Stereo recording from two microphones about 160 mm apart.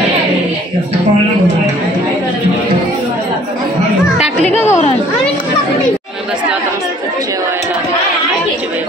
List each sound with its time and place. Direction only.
4.6 s chatter: 15° left (ahead or behind)